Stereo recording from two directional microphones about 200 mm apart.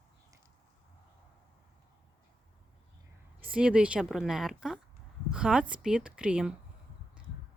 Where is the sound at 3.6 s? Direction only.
5° right (ahead or behind).